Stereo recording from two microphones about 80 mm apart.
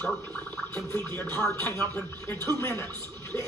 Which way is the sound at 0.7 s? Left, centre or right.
Left.